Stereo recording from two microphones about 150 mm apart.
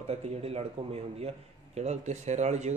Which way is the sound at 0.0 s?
45° right (ahead or behind).